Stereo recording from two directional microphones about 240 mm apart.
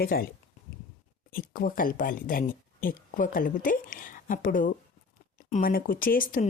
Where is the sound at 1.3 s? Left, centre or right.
Left.